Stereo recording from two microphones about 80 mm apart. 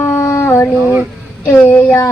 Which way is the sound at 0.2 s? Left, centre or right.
Left.